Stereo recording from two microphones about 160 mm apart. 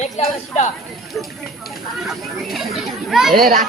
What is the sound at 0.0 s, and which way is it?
Speech, 45° left (ahead or behind).